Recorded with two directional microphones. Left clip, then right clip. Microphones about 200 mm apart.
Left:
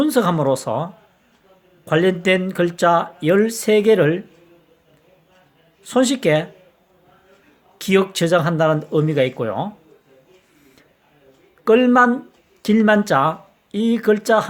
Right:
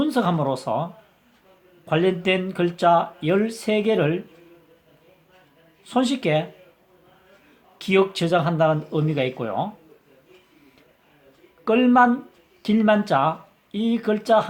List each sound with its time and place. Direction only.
0.0 s speech: 40° left (ahead or behind)
5.8 s speech: 40° left (ahead or behind)
7.8 s speech: 40° left (ahead or behind)
11.6 s speech: 40° left (ahead or behind)